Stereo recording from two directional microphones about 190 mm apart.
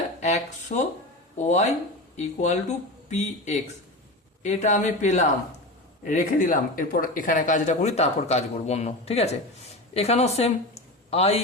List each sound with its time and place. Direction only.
0.2 s speech: 40° left (ahead or behind)